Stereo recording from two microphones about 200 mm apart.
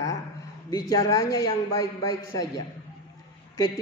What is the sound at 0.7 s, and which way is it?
Speech, 20° left (ahead or behind).